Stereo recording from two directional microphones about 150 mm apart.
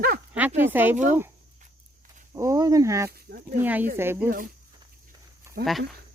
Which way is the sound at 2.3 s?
20° right (ahead or behind).